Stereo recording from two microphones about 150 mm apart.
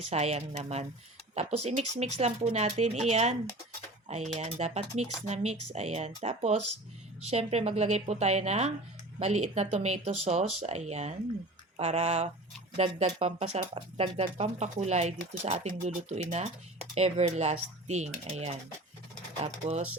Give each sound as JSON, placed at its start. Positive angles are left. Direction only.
{"t": 0.1, "sound": "speech", "side_deg": -45}